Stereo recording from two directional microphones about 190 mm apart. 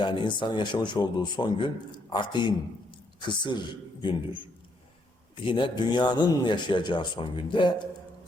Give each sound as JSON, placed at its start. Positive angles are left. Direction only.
{"t": 0.0, "sound": "a man's voice", "side_deg": 25}
{"t": 5.4, "sound": "a man's voice", "side_deg": 25}